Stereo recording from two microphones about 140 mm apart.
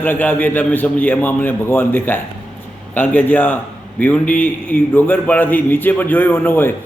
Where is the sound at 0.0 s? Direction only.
15° left (ahead or behind).